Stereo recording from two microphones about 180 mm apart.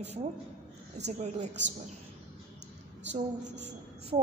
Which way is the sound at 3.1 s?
75° right (ahead or behind).